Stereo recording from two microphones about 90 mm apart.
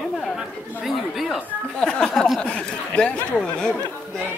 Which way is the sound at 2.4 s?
10° left (ahead or behind).